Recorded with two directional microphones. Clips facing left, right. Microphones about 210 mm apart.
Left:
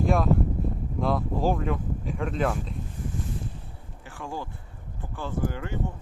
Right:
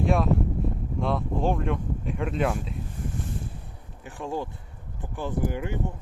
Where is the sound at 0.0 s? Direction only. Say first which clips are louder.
Even; centre (ahead or behind).